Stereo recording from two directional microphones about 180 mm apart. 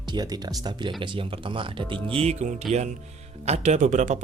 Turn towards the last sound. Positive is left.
turn(degrees=-40)  # may be behind; listen again after turning